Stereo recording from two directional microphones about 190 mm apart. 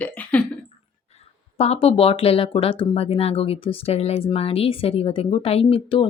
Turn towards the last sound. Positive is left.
turn(degrees=30)  # may be behind; listen again after turning